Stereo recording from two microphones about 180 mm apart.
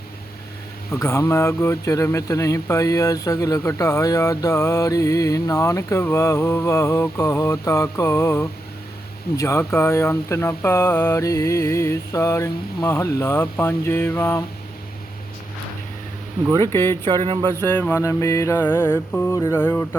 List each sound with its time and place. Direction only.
0.9 s a man's voice: 15° left (ahead or behind)
16.7 s a man's voice: 10° left (ahead or behind)
17.1 s a sound: 25° right (ahead or behind)
17.6 s a man's voice: 10° left (ahead or behind)